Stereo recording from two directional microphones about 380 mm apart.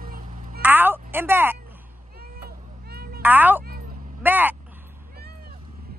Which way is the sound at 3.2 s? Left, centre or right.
Centre.